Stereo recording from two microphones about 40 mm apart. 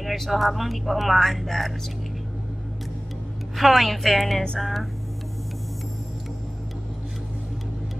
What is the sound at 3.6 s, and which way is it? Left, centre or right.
Speech, centre.